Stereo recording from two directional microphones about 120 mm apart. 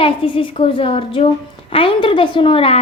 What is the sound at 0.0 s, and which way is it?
A woman's voice, 50° left (ahead or behind).